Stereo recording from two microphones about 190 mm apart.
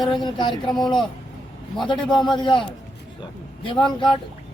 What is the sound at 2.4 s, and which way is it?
Speech, 25° left (ahead or behind).